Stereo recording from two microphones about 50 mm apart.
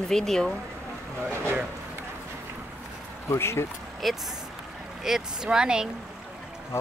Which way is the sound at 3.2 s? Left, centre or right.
Left.